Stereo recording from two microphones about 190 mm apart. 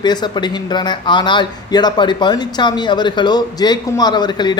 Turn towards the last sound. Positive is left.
turn(degrees=25)  # may be behind; listen again after turning